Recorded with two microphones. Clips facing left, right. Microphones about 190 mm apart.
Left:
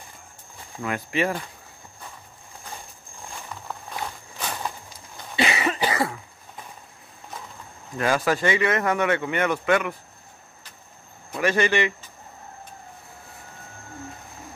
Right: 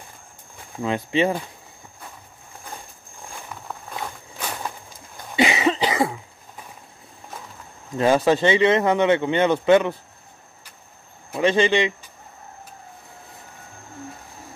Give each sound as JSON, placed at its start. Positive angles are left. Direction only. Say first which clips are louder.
{"t": 0.8, "sound": "speech", "louder": "right 4 dB", "side_deg": -25}
{"t": 5.3, "sound": "cough", "louder": "right 5 dB", "side_deg": -20}
{"t": 8.0, "sound": "speech", "louder": "right 5 dB", "side_deg": -25}
{"t": 11.3, "sound": "speech", "louder": "right 3 dB", "side_deg": -25}